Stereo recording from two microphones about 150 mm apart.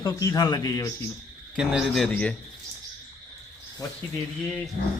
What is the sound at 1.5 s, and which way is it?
Speech, 5° right (ahead or behind).